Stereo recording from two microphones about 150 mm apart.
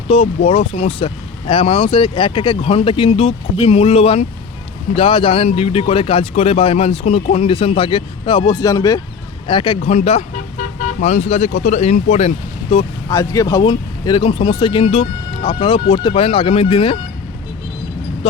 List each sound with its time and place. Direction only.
0.1 s speech: 40° left (ahead or behind); by 9.0 s 25° left (ahead or behind)
9.5 s speech: 35° left (ahead or behind)
10.6 s speech: 55° left (ahead or behind)
13.1 s speech: 20° left (ahead or behind)